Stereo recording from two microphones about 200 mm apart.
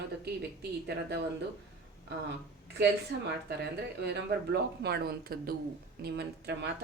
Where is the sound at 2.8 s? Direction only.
55° right (ahead or behind).